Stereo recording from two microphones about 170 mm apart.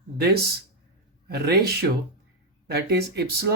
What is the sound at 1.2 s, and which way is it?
Speech, 70° right (ahead or behind).